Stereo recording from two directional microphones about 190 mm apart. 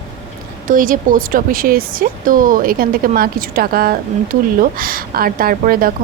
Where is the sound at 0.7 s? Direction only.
45° right (ahead or behind).